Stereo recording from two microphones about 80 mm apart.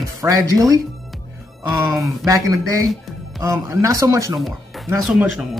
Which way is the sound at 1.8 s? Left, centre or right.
Right.